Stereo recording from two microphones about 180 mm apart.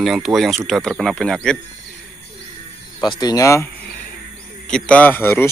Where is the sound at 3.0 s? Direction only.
20° left (ahead or behind).